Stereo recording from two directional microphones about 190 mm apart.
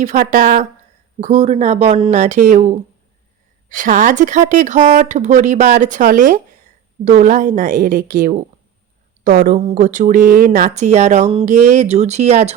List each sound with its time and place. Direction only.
0.0 s a woman's voice: 40° right (ahead or behind)
9.6 s speech: 40° right (ahead or behind)